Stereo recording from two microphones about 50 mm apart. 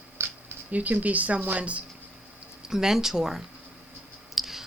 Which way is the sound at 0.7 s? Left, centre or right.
Right.